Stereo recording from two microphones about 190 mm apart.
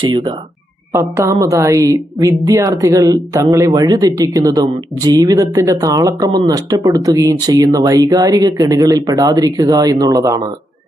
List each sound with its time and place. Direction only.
0.0 s speech: 25° right (ahead or behind)
0.9 s a woman's voice: 10° right (ahead or behind)